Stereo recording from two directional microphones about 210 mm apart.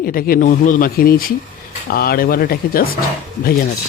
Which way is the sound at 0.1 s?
45° left (ahead or behind).